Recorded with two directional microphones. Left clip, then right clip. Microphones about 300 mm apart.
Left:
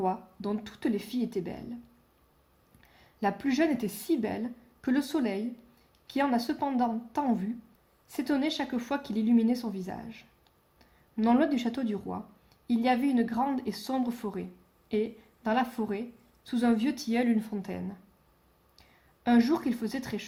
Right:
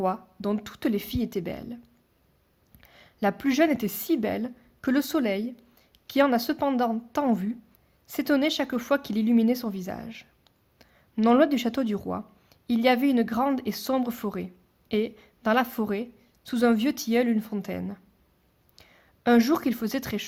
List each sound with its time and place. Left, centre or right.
0.0 s speech: right
2.8 s a woman's voice: right